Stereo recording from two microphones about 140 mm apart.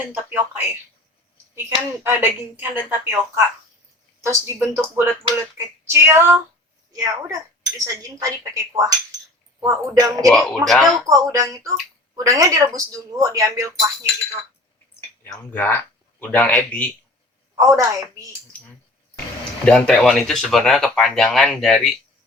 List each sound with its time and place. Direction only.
0.1 s a woman's voice: 15° right (ahead or behind)
2.0 s a woman's voice: 15° right (ahead or behind)
10.2 s speech: centre (ahead or behind)
11.0 s speech: 25° right (ahead or behind)
15.3 s speech: 15° left (ahead or behind)
17.5 s speech: 20° right (ahead or behind)
19.6 s speech: 5° left (ahead or behind)